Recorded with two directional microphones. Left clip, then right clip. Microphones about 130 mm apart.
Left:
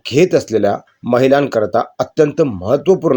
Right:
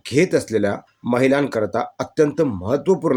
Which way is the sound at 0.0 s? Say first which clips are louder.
Left 5 dB; 15° left (ahead or behind).